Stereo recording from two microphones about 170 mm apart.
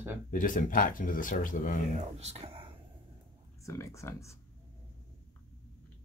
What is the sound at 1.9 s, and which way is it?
Speech, 40° right (ahead or behind).